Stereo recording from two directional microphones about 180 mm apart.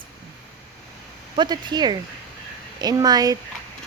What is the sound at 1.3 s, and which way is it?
A woman's voice, 25° right (ahead or behind).